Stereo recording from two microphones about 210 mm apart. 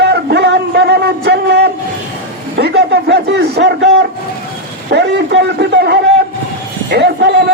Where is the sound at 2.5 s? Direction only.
50° right (ahead or behind).